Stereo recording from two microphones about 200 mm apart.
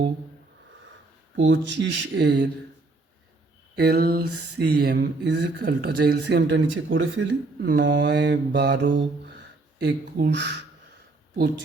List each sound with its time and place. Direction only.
1.4 s mantra: 65° right (ahead or behind)
3.8 s mantra: 50° right (ahead or behind)